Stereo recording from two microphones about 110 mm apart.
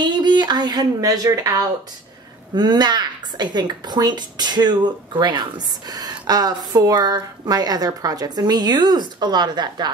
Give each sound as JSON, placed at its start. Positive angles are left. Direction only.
{"t": 0.0, "sound": "a woman's voice", "side_deg": -40}